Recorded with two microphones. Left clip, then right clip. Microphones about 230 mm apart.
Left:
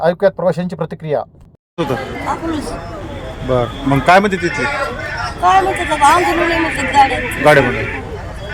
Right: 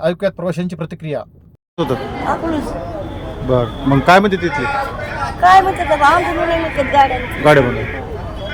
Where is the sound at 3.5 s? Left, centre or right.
Centre.